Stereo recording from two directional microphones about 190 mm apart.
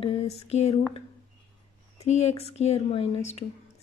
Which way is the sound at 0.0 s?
30° left (ahead or behind).